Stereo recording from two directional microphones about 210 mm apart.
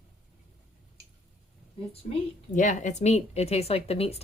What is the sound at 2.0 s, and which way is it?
A woman's voice, 30° left (ahead or behind).